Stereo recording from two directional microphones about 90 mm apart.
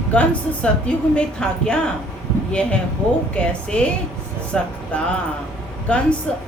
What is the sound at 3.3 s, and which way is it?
Speech, 10° left (ahead or behind).